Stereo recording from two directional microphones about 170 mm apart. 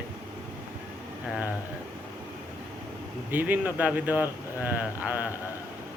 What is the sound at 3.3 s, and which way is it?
A man's voice, 10° right (ahead or behind).